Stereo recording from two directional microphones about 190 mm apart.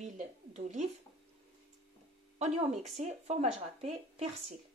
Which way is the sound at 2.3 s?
35° right (ahead or behind).